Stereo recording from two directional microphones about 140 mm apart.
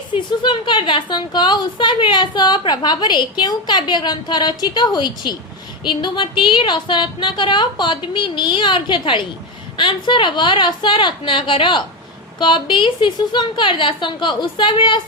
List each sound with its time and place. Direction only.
0.1 s a woman's voice: 35° left (ahead or behind)